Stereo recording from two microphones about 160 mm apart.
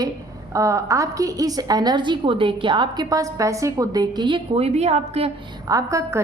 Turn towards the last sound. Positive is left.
turn(degrees=-20)  # may be behind; listen again after turning